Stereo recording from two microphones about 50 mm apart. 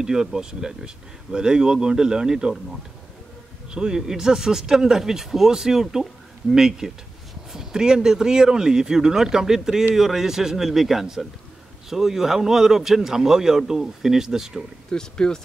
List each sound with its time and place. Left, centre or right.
0.0 s speech: centre
3.7 s speech: centre
14.9 s speech: centre